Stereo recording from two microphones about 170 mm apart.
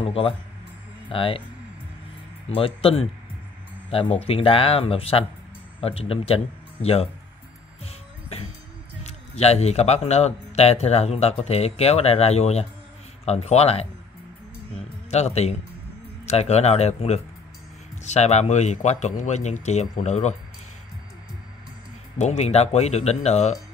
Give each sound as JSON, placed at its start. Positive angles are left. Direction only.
{"t": 0.0, "sound": "speech", "side_deg": 35}
{"t": 2.5, "sound": "speech", "side_deg": 35}
{"t": 7.8, "sound": "music", "side_deg": 35}
{"t": 9.0, "sound": "speech", "side_deg": 40}
{"t": 15.0, "sound": "speech", "side_deg": 40}
{"t": 22.2, "sound": "speech", "side_deg": 40}